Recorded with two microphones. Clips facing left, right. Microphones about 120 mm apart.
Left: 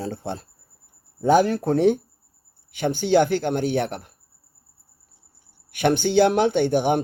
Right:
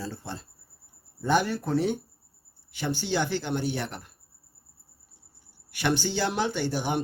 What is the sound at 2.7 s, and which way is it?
Speech, 55° left (ahead or behind).